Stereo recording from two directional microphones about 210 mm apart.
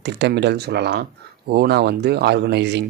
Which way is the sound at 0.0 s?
55° right (ahead or behind).